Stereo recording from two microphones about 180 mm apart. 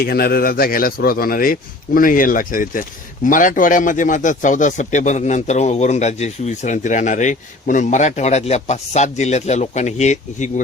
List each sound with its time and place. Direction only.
0.0 s speech: 60° left (ahead or behind); by 10.5 s 40° left (ahead or behind)